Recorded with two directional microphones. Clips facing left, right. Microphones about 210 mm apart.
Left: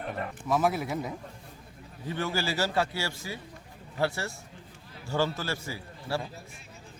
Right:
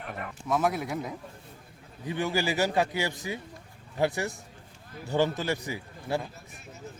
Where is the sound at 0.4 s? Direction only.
Centre (ahead or behind).